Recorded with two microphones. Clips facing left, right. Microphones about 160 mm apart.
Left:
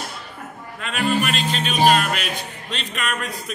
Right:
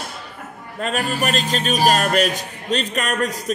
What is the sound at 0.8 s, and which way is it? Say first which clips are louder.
A man's voice: even; 40° right (ahead or behind).